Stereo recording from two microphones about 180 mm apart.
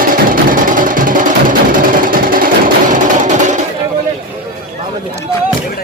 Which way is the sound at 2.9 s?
45° right (ahead or behind).